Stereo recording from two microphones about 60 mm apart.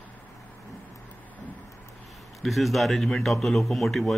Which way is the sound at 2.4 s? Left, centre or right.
Centre.